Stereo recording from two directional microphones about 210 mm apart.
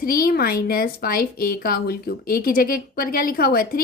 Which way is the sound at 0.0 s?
45° left (ahead or behind).